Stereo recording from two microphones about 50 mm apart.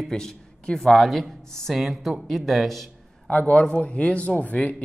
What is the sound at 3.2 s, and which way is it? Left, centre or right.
A man's voice, left.